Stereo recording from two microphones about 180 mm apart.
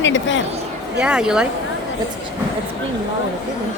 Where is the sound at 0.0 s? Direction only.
90° left.